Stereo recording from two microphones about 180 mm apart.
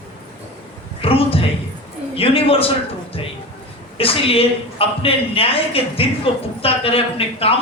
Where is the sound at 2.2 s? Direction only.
30° left (ahead or behind).